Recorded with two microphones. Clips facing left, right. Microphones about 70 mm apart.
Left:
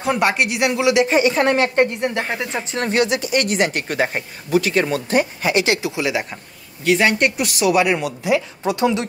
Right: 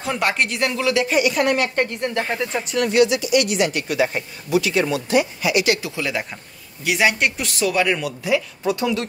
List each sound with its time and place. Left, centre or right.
0.0 s speech: centre; by 1.9 s left
2.0 s speech: left
6.8 s speech: centre
8.0 s speech: left